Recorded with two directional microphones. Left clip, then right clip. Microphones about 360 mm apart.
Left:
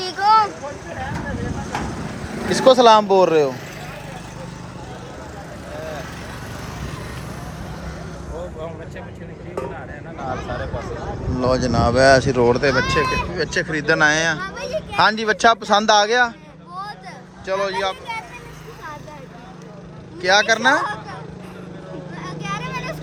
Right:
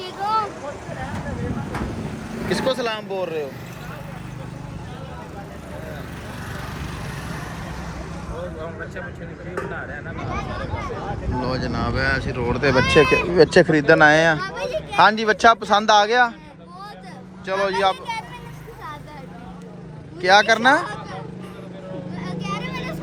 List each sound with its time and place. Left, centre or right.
0.0 s vehicle: left
2.5 s speech: centre
11.3 s speech: centre
17.4 s speech: centre
20.2 s speech: centre
22.2 s vehicle: centre